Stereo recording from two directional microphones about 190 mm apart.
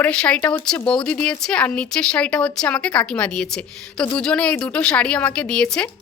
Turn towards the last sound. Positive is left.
turn(degrees=5)  # may be behind; listen again after turning